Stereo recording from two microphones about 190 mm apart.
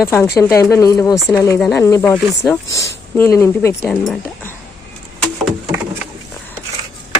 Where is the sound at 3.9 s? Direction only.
Centre (ahead or behind).